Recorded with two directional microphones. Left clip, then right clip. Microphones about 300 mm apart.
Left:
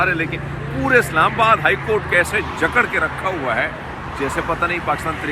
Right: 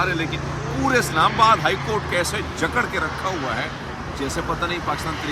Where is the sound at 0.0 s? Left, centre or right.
Centre.